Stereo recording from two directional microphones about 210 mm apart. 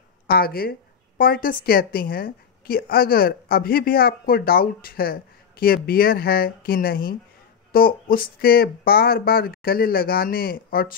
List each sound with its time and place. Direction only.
0.3 s a woman's voice: 45° left (ahead or behind)